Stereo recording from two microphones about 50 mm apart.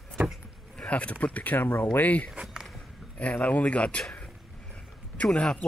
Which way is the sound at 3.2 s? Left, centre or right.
Left.